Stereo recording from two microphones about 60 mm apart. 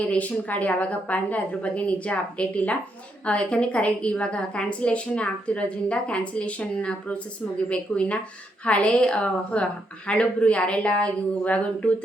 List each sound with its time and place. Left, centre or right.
0.0 s a woman's voice: left